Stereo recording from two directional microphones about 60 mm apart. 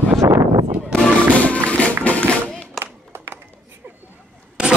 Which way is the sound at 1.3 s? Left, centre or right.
Left.